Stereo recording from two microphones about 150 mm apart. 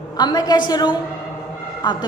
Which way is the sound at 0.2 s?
30° left (ahead or behind).